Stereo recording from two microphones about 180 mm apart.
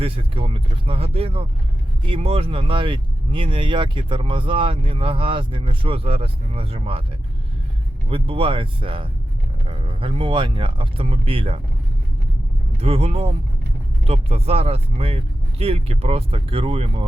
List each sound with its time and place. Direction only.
0.0 s speech: 30° right (ahead or behind)
8.1 s speech: 30° right (ahead or behind)
12.7 s speech: 35° right (ahead or behind)